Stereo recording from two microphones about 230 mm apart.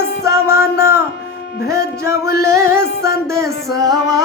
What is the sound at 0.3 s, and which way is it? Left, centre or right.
Music, centre.